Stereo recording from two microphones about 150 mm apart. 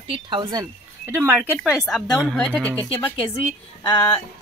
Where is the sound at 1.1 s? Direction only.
15° right (ahead or behind).